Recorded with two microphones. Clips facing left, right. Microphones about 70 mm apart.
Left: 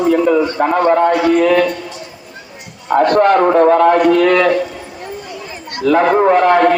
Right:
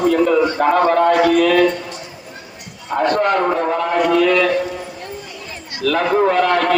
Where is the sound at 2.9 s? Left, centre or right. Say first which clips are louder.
Left 6 dB; left.